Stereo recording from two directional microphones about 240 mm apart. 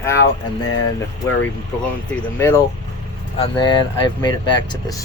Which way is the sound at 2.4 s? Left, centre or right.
Centre.